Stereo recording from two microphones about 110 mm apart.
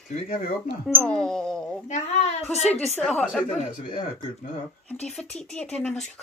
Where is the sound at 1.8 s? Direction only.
90° left.